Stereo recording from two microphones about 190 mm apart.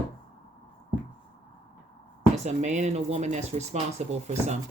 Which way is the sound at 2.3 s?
40° right (ahead or behind).